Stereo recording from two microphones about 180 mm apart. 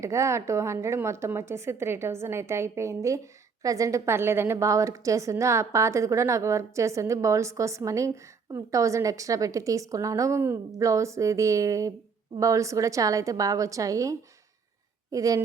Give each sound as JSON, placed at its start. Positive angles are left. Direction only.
{"t": 0.0, "sound": "a woman's voice", "side_deg": -15}